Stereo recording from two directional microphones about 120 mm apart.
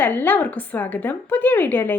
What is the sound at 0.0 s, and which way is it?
A woman's voice, 15° left (ahead or behind).